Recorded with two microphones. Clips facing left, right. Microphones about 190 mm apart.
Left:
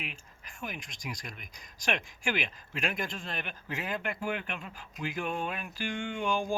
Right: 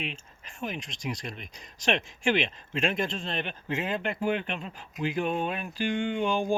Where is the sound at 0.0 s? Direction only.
25° right (ahead or behind).